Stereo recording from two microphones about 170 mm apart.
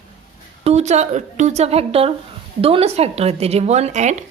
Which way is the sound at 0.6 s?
40° right (ahead or behind).